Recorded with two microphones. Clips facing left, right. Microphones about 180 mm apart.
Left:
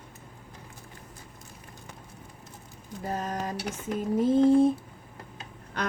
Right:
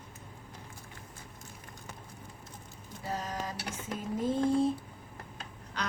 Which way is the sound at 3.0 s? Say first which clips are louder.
Left 5 dB; 50° left (ahead or behind).